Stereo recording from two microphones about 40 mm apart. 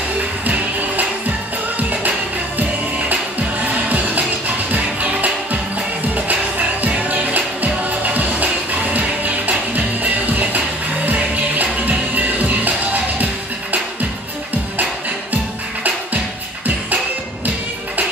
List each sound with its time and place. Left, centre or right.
0.5 s music: right
3.6 s music: right
15.3 s music: right